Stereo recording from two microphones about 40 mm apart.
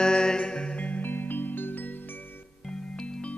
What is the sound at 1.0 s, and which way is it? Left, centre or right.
Music, left.